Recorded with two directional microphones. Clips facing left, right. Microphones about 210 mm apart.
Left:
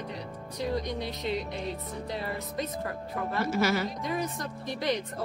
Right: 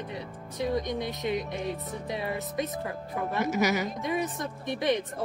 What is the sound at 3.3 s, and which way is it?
A woman's voice, 15° right (ahead or behind).